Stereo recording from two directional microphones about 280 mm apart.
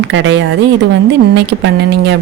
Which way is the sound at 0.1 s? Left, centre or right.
Right.